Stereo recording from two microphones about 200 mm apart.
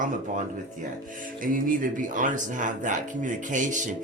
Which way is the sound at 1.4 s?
45° right (ahead or behind).